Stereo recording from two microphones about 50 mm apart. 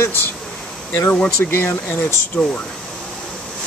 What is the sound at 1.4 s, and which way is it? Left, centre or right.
Speech, left.